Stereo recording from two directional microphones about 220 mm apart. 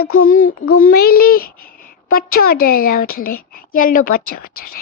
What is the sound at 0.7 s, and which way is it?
A child's voice, 40° left (ahead or behind).